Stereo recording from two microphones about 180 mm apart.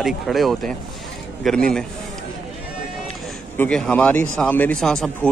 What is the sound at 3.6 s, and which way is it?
Speech, 5° left (ahead or behind).